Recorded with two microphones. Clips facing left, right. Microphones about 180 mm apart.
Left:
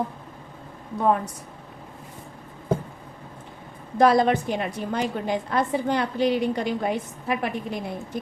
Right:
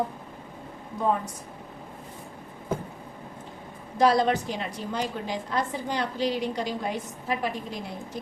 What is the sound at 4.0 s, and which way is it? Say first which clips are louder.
A woman's voice: left 3 dB; 55° left (ahead or behind).